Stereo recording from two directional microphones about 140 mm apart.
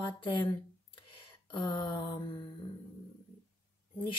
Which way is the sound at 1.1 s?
35° left (ahead or behind).